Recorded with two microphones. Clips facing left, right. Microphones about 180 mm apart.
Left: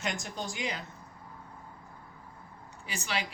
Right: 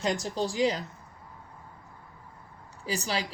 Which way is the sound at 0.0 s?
35° right (ahead or behind).